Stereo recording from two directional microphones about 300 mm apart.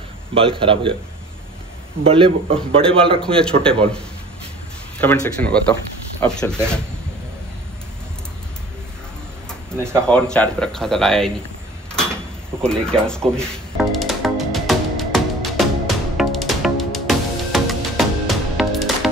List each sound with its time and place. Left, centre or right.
0.3 s a man's voice: centre
2.0 s a man's voice: centre
5.0 s speech: centre
9.5 s speech: centre
11.9 s a sound: centre
12.6 s music: centre